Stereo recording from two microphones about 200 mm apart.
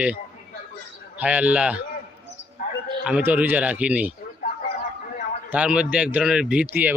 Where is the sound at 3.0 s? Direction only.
5° right (ahead or behind).